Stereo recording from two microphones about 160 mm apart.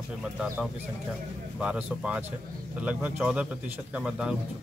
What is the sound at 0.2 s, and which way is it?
A man's voice, 5° right (ahead or behind).